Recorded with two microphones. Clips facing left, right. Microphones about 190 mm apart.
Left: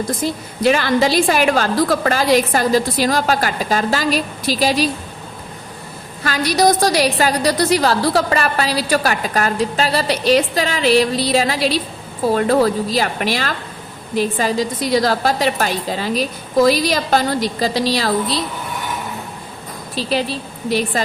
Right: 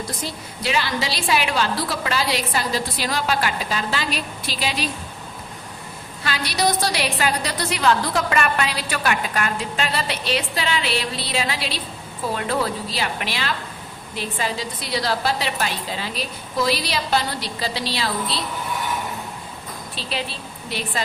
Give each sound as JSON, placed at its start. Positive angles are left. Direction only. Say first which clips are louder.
{"t": 0.3, "sound": "a woman's voice", "louder": "left 14 dB", "side_deg": 50}
{"t": 6.2, "sound": "a woman's voice", "louder": "left 7 dB", "side_deg": 45}
{"t": 20.0, "sound": "a woman's voice", "louder": "left 10 dB", "side_deg": 40}